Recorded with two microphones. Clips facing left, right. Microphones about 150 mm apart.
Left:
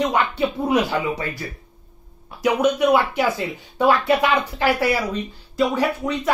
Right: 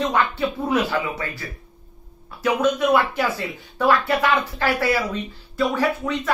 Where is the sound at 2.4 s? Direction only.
15° left (ahead or behind).